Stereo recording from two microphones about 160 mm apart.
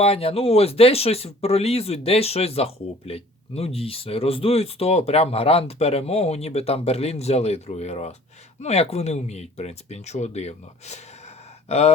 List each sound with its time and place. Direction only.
0.0 s speech: 35° left (ahead or behind)